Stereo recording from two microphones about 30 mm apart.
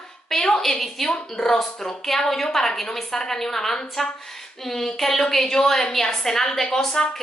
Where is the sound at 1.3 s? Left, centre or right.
Centre.